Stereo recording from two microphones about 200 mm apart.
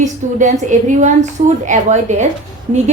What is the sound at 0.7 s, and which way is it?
A woman's voice, 35° right (ahead or behind).